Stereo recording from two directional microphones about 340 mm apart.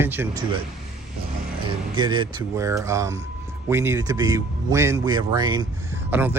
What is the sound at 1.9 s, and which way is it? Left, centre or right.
Speech, centre.